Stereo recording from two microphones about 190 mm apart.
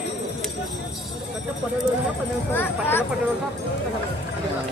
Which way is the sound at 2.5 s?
10° left (ahead or behind).